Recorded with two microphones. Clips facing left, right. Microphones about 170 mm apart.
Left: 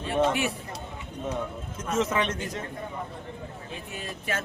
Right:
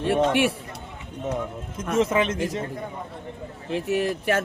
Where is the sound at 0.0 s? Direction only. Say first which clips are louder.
Right 4 dB; 70° right (ahead or behind).